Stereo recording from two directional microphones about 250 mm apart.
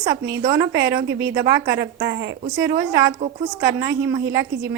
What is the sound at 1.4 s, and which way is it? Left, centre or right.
Speech, right.